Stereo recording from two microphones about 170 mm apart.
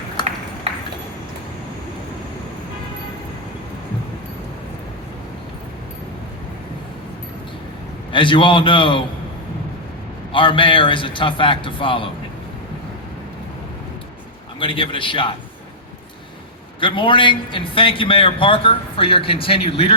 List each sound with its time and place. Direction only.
0.2 s ping: 25° left (ahead or behind)
8.1 s a man's voice: 30° left (ahead or behind)
10.3 s a man's voice: 30° left (ahead or behind)
14.6 s a man's voice: 30° left (ahead or behind)
16.8 s a man's voice: 30° left (ahead or behind)